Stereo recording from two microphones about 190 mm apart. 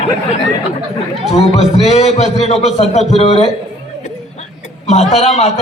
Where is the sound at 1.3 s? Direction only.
35° left (ahead or behind).